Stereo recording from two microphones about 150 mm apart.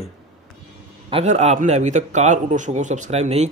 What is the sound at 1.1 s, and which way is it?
A man's voice, 45° right (ahead or behind).